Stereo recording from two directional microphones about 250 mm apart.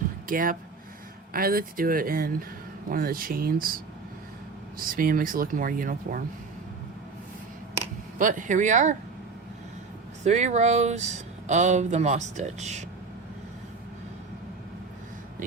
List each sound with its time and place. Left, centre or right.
0.3 s speech: right
4.8 s speech: right
8.2 s speech: right
10.2 s speech: right